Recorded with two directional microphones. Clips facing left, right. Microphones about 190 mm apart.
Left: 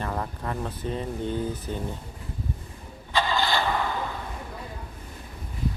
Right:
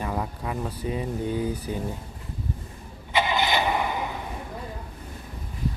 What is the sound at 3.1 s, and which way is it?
Engine starting, 15° right (ahead or behind).